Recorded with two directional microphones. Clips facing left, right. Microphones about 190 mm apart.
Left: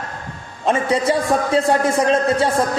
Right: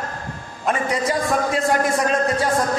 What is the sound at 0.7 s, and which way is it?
A man's voice, 30° left (ahead or behind).